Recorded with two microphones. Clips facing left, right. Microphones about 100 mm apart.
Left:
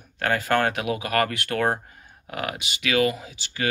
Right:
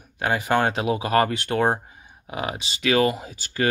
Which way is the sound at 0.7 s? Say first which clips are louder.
Right 3 dB; 30° right (ahead or behind).